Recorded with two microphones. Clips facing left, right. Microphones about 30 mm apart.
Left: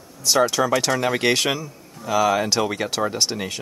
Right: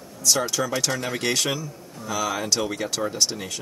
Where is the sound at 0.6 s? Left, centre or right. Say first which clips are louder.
Left 5 dB; left.